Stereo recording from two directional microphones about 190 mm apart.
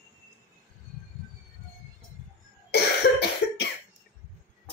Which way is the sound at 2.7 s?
60° left (ahead or behind).